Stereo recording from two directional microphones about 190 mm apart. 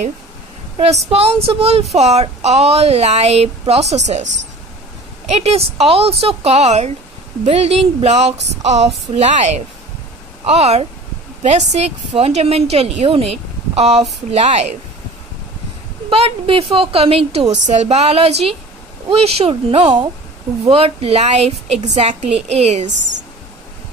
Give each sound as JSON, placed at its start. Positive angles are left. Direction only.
{"t": 0.7, "sound": "a woman's voice", "side_deg": -35}
{"t": 5.3, "sound": "a woman's voice", "side_deg": -30}
{"t": 16.1, "sound": "a woman's voice", "side_deg": -30}